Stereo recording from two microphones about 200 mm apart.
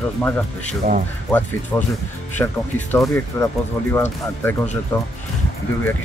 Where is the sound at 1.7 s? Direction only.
15° left (ahead or behind).